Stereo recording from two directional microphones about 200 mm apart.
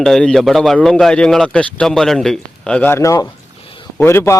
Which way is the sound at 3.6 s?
25° left (ahead or behind).